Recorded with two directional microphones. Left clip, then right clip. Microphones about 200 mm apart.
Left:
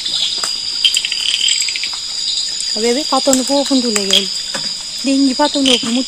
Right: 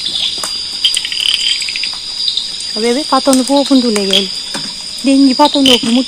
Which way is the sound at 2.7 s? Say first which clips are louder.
Right 3 dB; 15° left (ahead or behind).